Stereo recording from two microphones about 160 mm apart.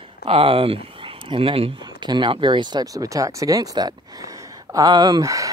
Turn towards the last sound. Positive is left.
turn(degrees=-20)  # may be behind; listen again after turning